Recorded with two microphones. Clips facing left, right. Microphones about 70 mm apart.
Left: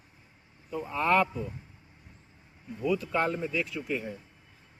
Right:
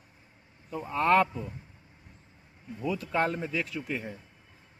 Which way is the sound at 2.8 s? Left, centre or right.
Right.